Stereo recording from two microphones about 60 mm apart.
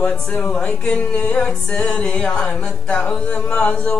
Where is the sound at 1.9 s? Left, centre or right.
Centre.